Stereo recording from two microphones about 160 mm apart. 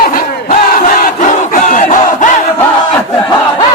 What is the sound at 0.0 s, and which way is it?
Battle cry, 60° left (ahead or behind).